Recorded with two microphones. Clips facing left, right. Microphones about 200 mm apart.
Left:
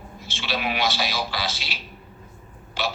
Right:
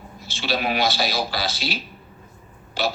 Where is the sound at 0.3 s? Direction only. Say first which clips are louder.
Right 4 dB; 35° right (ahead or behind).